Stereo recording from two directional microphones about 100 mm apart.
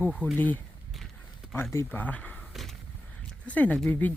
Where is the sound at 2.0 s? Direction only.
15° left (ahead or behind).